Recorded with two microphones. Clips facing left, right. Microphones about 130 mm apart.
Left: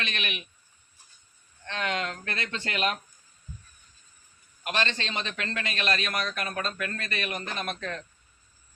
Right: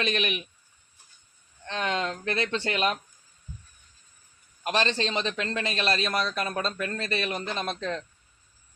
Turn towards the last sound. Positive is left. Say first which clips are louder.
# right 3 dB
turn(degrees=-25)  # may be behind; listen again after turning